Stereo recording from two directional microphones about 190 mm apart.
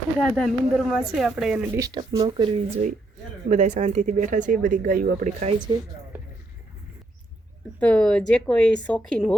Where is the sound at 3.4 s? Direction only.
40° right (ahead or behind).